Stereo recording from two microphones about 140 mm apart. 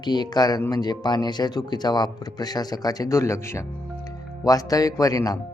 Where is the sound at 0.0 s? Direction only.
30° left (ahead or behind).